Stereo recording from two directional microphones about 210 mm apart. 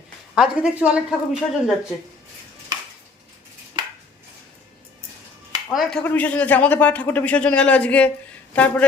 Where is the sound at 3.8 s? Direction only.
20° right (ahead or behind).